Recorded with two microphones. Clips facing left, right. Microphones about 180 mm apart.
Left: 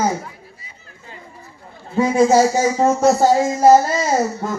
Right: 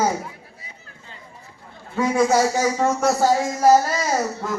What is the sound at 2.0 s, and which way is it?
Speech, 25° left (ahead or behind).